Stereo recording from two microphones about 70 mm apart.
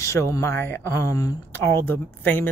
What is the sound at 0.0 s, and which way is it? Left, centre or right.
Speech, left.